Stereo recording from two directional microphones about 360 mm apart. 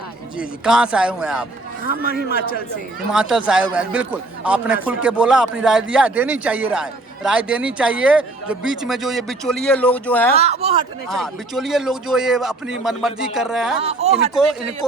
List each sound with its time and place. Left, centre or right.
0.3 s a man's voice: centre
2.3 s a man's voice: left
3.1 s a man's voice: centre
10.3 s speech: centre
11.1 s a man's voice: centre
14.0 s speech: centre